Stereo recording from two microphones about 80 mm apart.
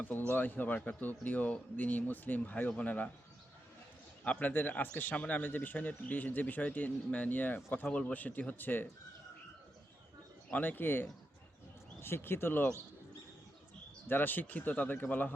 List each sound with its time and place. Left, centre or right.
0.0 s speech: left
4.2 s speech: centre
10.5 s speech: left
14.1 s speech: left